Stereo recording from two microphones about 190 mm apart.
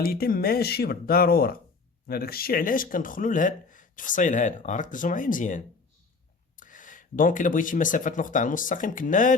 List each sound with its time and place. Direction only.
0.0 s speech: 50° left (ahead or behind)